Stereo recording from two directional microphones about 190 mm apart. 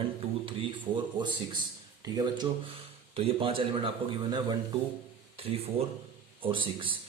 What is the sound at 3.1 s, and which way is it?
Speech, 30° right (ahead or behind).